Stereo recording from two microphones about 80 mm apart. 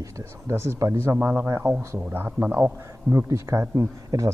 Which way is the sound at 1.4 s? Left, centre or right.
Right.